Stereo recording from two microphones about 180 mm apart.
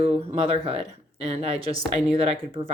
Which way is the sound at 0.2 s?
35° right (ahead or behind).